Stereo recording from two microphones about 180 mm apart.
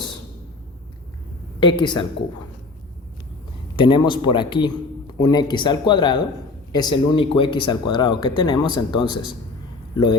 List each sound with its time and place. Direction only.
1.5 s speech: 25° left (ahead or behind)
3.8 s a man's voice: 25° left (ahead or behind)